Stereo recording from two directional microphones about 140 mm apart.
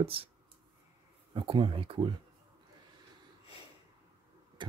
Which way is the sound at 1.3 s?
35° right (ahead or behind).